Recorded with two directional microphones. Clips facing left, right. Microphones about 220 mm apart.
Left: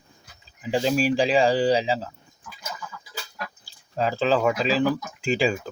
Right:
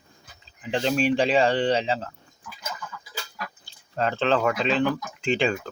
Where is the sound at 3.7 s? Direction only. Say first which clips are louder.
Left 1 dB; 5° left (ahead or behind).